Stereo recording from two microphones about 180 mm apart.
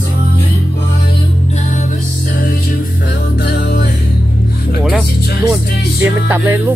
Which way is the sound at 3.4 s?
60° left (ahead or behind).